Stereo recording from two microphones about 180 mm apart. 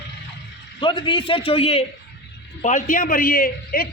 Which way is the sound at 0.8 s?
25° left (ahead or behind).